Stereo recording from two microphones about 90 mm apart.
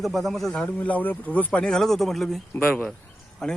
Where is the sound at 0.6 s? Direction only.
20° left (ahead or behind).